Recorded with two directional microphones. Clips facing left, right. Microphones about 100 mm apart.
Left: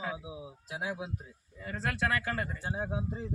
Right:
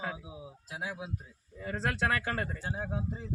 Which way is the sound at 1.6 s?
30° right (ahead or behind).